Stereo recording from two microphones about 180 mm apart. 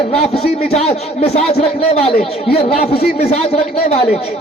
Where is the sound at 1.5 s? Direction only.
35° left (ahead or behind).